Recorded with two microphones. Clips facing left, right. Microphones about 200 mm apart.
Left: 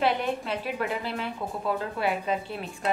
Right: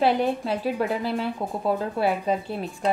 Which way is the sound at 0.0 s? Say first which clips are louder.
Right 4 dB; 35° right (ahead or behind).